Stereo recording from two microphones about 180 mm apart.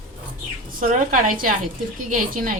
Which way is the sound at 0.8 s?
45° right (ahead or behind).